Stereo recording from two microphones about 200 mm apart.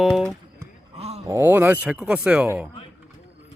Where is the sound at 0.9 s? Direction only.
30° right (ahead or behind).